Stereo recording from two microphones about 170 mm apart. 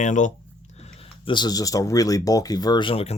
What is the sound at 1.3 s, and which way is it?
Speech, 25° left (ahead or behind).